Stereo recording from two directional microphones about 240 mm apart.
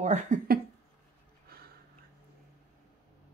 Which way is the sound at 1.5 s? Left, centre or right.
Right.